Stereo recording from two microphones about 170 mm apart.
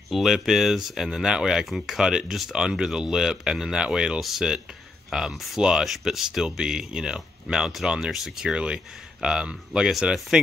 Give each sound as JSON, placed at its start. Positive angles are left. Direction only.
{"t": 0.1, "sound": "speech", "side_deg": 0}